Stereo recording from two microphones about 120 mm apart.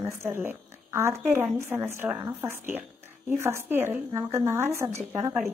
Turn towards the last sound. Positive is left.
turn(degrees=-20)  # may be behind; listen again after turning